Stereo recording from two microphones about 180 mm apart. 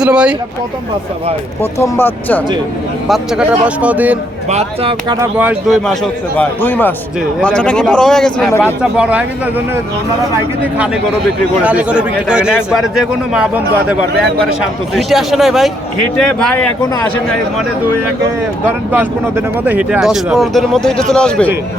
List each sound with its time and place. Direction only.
0.0 s speech: 5° right (ahead or behind)
1.8 s a man's voice: 10° left (ahead or behind)
3.1 s speech: 5° right (ahead or behind)
4.4 s speech: 35° right (ahead or behind)
5.2 s speech: 10° right (ahead or behind)
5.8 s a man's voice: 5° left (ahead or behind)
11.6 s speech: 5° right (ahead or behind)
18.9 s speech: 10° right (ahead or behind); by 21.5 s 5° left (ahead or behind)